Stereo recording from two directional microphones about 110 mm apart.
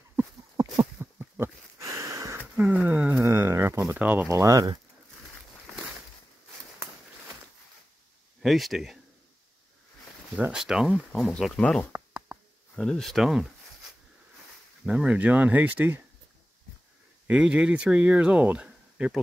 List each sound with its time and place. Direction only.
0.1 s a sound: 25° right (ahead or behind)
1.8 s a sound: 30° right (ahead or behind)
2.6 s speech: centre (ahead or behind)
3.3 s a sound: 25° right (ahead or behind)
3.9 s speech: 15° right (ahead or behind)
4.3 s speech: 30° right (ahead or behind)
8.4 s speech: centre (ahead or behind)
10.5 s speech: 5° right (ahead or behind)
14.9 s speech: 10° right (ahead or behind)
17.3 s speech: 10° right (ahead or behind)